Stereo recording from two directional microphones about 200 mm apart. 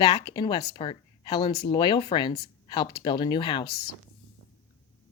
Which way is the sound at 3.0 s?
20° left (ahead or behind).